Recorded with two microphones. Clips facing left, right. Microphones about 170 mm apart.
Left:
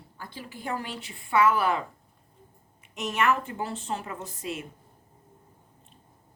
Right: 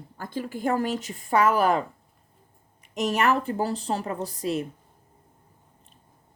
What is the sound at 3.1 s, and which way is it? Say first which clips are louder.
Speech: right 2 dB; 35° right (ahead or behind).